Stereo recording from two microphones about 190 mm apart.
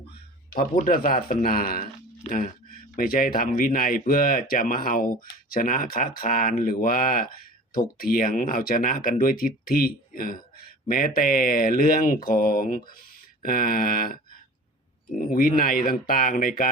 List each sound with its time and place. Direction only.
0.5 s speech: 45° left (ahead or behind)
2.9 s speech: 50° left (ahead or behind)
15.3 s speech: 50° left (ahead or behind)